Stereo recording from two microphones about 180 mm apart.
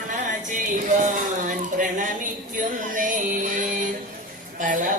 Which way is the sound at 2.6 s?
45° right (ahead or behind).